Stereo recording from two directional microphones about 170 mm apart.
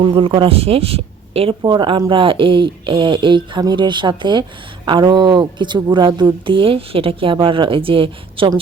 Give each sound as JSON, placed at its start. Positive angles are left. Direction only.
{"t": 0.0, "sound": "speech", "side_deg": -30}